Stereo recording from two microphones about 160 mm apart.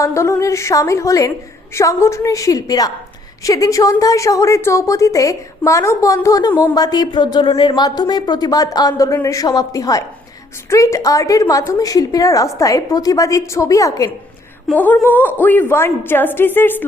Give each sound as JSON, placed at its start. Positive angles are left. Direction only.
{"t": 0.0, "sound": "a woman's voice", "side_deg": 20}
{"t": 14.7, "sound": "a woman's voice", "side_deg": 10}